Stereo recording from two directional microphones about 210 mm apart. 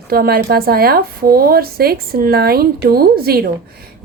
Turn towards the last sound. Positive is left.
turn(degrees=-45)  # may be behind; listen again after turning